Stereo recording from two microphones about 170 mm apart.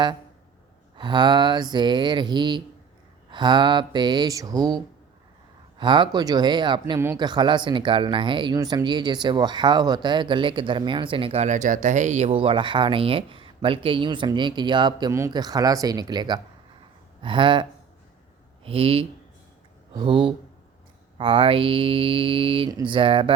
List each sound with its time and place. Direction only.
0.9 s speech: 25° right (ahead or behind)